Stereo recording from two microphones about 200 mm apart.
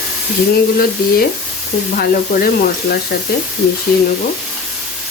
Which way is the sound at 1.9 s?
50° left (ahead or behind).